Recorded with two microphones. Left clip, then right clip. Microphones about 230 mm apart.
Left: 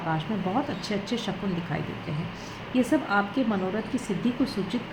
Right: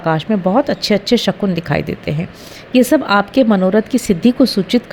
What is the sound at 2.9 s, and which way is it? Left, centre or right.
Speech, right.